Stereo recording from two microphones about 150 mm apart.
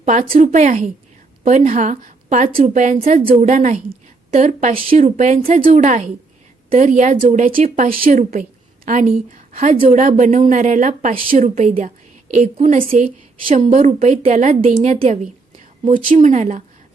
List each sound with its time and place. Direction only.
0.0 s a woman's voice: 55° right (ahead or behind)
13.7 s a woman's voice: 55° right (ahead or behind)